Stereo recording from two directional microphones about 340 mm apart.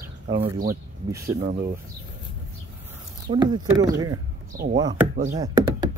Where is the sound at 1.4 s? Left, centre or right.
Right.